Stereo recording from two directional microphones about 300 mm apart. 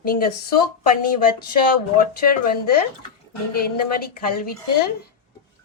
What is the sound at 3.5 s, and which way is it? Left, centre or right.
Speech, left.